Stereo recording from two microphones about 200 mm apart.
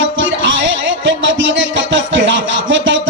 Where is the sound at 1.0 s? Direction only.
65° right (ahead or behind).